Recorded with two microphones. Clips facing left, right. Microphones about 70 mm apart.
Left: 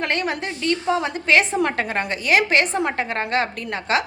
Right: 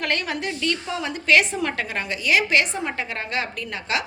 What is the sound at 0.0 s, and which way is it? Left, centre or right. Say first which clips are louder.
A woman's voice: left 2 dB; left.